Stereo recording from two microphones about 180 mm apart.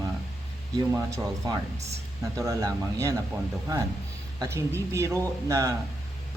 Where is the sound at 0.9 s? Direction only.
15° right (ahead or behind).